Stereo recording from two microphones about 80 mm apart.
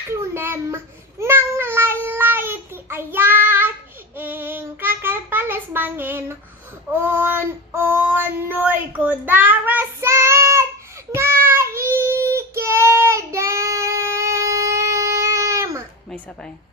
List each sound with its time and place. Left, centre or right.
0.1 s a sound: right
1.2 s child singing: right
6.9 s speech: right
10.1 s child singing: right